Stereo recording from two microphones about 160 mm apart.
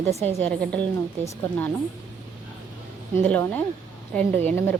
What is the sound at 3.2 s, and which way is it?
Speech, 10° left (ahead or behind).